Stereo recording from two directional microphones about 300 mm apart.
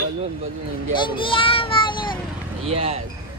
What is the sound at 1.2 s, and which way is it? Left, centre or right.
Child singing, centre.